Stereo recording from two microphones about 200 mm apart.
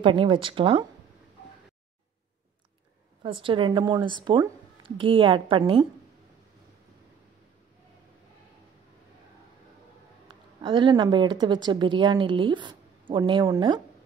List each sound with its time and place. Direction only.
0.0 s speech: 25° right (ahead or behind)
3.2 s speech: 25° right (ahead or behind)
10.2 s a woman's voice: 25° right (ahead or behind)